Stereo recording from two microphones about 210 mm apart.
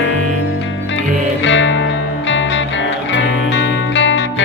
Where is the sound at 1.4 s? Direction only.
60° left (ahead or behind).